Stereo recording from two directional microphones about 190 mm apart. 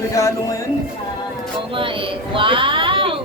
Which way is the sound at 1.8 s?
25° right (ahead or behind).